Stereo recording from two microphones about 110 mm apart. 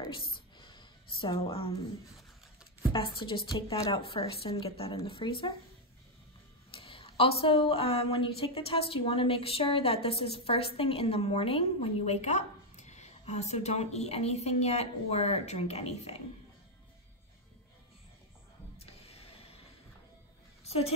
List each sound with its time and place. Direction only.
0.3 s a sound: 45° left (ahead or behind)
2.9 s a woman's voice: 50° left (ahead or behind)
6.7 s a woman's voice: 55° left (ahead or behind); by 16.2 s 75° left (ahead or behind)
18.8 s music: 65° left (ahead or behind)
20.6 s music: 65° left (ahead or behind)